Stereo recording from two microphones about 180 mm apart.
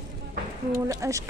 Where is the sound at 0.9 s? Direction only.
15° right (ahead or behind).